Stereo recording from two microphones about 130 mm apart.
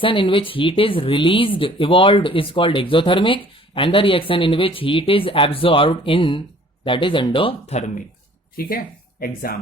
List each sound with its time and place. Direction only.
0.0 s speech: 40° left (ahead or behind)